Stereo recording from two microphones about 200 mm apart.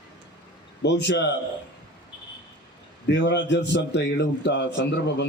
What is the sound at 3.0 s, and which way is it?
A man's voice, 60° left (ahead or behind).